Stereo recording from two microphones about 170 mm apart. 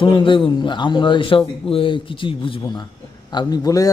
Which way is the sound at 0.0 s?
30° left (ahead or behind).